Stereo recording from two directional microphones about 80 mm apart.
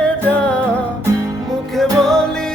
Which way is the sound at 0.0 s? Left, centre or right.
Centre.